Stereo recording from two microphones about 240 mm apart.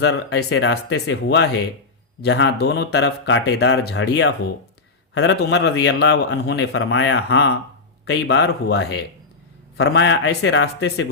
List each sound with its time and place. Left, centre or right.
0.0 s a man's voice: left